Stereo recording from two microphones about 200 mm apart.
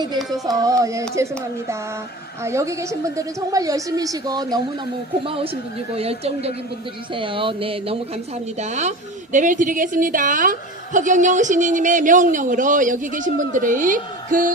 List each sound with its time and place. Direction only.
0.2 s music: centre (ahead or behind)
0.4 s a woman's voice: 15° right (ahead or behind)
2.4 s a woman's voice: 15° right (ahead or behind)
5.2 s a woman's voice: 30° right (ahead or behind)